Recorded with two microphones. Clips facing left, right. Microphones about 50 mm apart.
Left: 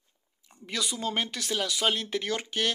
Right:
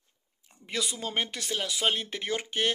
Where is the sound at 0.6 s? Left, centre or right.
Centre.